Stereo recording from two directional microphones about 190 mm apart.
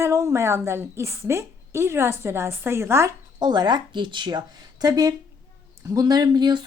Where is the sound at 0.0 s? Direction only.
15° right (ahead or behind).